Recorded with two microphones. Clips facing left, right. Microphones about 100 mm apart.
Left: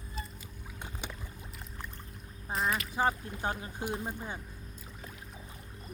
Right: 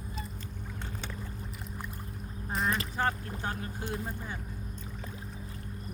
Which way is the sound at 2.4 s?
5° left (ahead or behind).